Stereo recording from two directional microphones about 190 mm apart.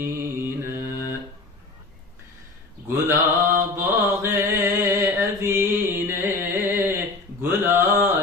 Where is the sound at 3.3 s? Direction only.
15° right (ahead or behind).